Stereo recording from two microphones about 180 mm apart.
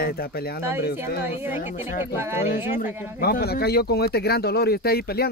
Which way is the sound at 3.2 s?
60° left (ahead or behind).